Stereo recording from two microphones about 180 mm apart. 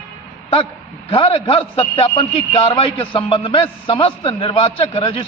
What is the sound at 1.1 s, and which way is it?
A man's voice, 30° left (ahead or behind).